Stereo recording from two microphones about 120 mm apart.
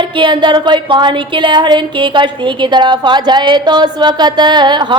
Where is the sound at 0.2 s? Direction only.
40° right (ahead or behind).